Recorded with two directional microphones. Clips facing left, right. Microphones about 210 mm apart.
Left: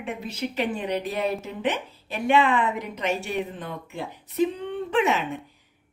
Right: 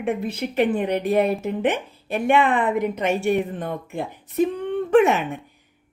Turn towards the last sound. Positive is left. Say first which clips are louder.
# right 7 dB
turn(degrees=-50)  # may be behind; listen again after turning